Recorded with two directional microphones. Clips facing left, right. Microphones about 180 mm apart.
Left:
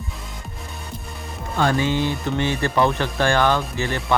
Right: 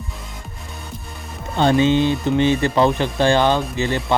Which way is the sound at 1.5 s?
20° right (ahead or behind).